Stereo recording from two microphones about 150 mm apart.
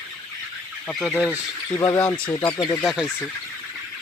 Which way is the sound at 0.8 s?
5° left (ahead or behind).